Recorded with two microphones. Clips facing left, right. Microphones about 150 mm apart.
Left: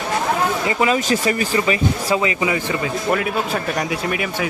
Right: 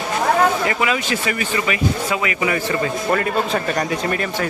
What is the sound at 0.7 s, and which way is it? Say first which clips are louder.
Speech: left 3 dB; 35° left (ahead or behind).